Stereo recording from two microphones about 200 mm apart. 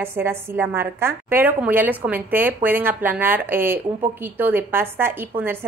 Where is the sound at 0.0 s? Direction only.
10° right (ahead or behind).